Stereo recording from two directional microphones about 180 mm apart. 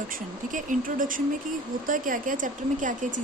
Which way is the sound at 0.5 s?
50° right (ahead or behind).